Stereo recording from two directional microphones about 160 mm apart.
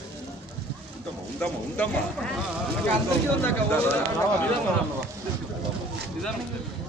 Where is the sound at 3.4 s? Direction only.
15° left (ahead or behind).